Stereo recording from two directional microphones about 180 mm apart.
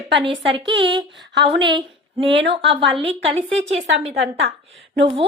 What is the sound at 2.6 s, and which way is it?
Speech, 30° right (ahead or behind).